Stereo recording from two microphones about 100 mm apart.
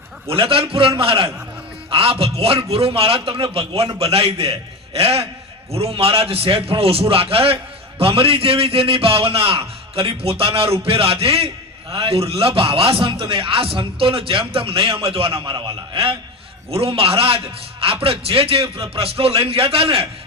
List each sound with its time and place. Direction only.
0.3 s a man's voice: 65° right (ahead or behind)
4.9 s a man's voice: 90° right
5.7 s a man's voice: 80° right; by 16.0 s 45° right (ahead or behind)
16.7 s a man's voice: 70° right (ahead or behind)